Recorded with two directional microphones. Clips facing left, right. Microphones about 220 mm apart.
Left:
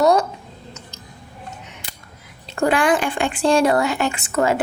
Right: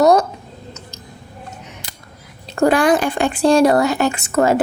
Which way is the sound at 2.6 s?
40° right (ahead or behind).